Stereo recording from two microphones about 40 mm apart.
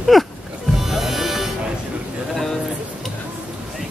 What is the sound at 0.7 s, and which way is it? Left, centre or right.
Music, centre.